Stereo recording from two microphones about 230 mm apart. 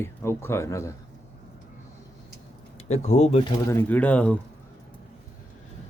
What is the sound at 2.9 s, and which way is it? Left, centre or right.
Speech, left.